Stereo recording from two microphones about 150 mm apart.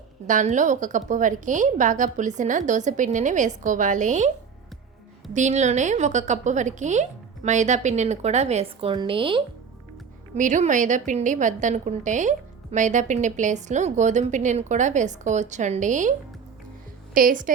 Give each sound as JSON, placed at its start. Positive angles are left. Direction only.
{"t": 0.3, "sound": "a woman's voice", "side_deg": -55}
{"t": 5.3, "sound": "a woman's voice", "side_deg": -55}
{"t": 10.3, "sound": "a woman's voice", "side_deg": -55}
{"t": 17.2, "sound": "a woman's voice", "side_deg": -65}